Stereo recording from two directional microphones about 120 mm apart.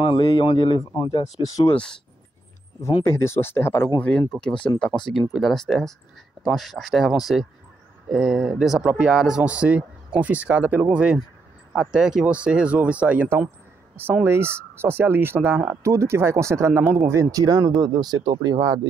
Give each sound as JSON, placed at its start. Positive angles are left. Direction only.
{"t": 0.0, "sound": "a man's voice", "side_deg": 45}
{"t": 1.7, "sound": "speech", "side_deg": 10}
{"t": 3.1, "sound": "speech", "side_deg": 20}
{"t": 4.3, "sound": "speech", "side_deg": 5}